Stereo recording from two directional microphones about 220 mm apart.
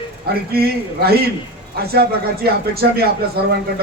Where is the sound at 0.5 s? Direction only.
45° right (ahead or behind).